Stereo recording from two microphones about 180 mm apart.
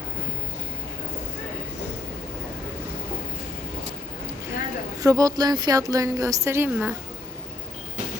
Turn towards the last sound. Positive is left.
turn(degrees=-10)  # may be behind; listen again after turning